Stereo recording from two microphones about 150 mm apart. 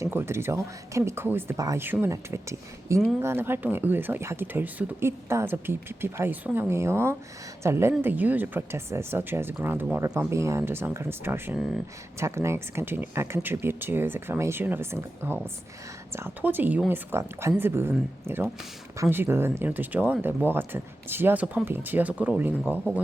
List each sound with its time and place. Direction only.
0.0 s speech: 15° right (ahead or behind)